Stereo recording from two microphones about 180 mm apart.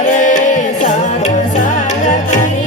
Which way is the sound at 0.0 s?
45° left (ahead or behind).